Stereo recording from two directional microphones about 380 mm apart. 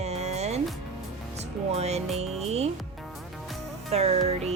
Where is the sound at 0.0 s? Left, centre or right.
Centre.